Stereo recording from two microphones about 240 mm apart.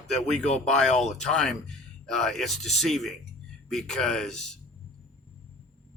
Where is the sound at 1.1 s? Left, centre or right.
Centre.